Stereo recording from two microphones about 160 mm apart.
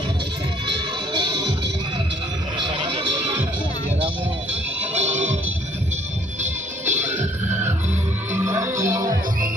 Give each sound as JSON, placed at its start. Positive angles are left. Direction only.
{"t": 1.1, "sound": "music", "side_deg": -30}
{"t": 2.6, "sound": "a sound", "side_deg": -30}
{"t": 6.4, "sound": "music", "side_deg": -50}
{"t": 8.3, "sound": "music", "side_deg": -15}
{"t": 8.9, "sound": "music", "side_deg": -55}